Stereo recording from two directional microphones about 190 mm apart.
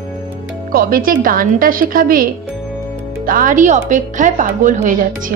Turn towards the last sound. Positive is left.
turn(degrees=-40)  # may be behind; listen again after turning